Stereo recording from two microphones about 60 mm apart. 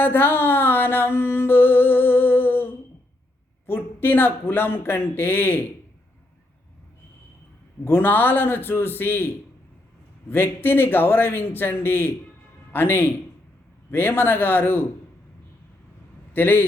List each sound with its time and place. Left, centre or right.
0.0 s a sound: left
3.7 s speech: left
7.9 s speech: left
16.3 s speech: left